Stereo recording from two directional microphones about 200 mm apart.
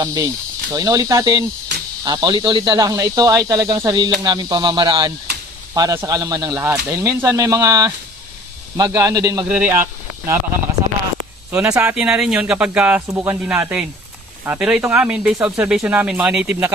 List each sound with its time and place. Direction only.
0.0 s speech: 20° right (ahead or behind)
11.7 s speech: 10° right (ahead or behind)